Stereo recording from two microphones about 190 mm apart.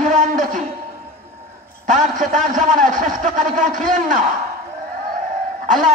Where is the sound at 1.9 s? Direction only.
40° right (ahead or behind).